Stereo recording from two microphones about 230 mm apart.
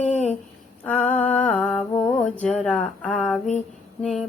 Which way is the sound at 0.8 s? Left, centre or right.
Centre.